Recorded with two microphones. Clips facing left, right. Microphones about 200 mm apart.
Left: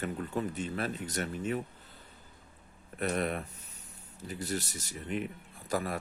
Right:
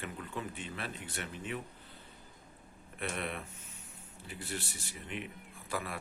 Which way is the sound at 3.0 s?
40° left (ahead or behind).